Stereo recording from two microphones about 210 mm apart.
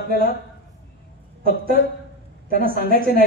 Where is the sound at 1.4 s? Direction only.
45° right (ahead or behind).